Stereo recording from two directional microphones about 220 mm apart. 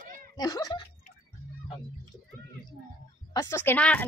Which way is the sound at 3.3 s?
10° left (ahead or behind).